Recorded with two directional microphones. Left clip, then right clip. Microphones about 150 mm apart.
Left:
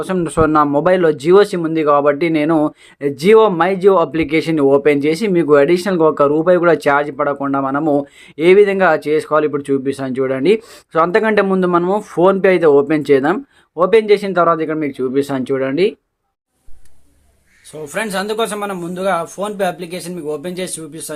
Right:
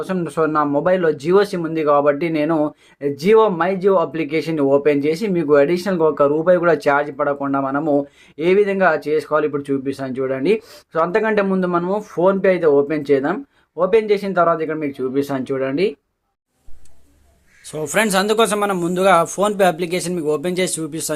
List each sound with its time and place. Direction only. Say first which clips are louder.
0.0 s speech: left 4 dB; 35° left (ahead or behind)
17.7 s a man's voice: right 4 dB; 35° right (ahead or behind)